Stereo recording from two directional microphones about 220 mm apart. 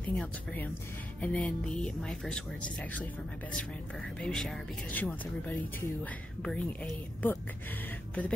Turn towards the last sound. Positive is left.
turn(degrees=5)  # may be behind; listen again after turning